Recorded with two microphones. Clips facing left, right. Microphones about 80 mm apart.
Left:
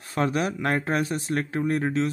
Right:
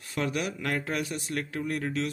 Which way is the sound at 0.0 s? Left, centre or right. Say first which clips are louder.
Left 5 dB; left.